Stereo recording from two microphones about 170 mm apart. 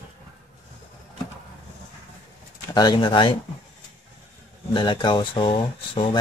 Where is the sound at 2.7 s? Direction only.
25° left (ahead or behind).